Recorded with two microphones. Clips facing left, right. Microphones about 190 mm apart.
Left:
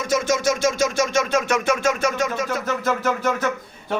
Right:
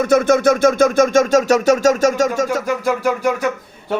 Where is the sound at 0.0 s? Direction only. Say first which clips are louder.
Right 8 dB; 55° right (ahead or behind).